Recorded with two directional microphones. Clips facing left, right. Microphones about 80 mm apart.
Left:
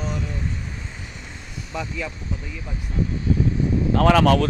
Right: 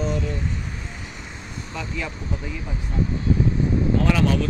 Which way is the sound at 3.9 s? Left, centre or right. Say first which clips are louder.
Left 7 dB; left.